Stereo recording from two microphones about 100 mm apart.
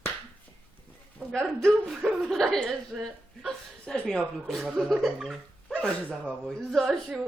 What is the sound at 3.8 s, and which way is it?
Speech, 10° left (ahead or behind).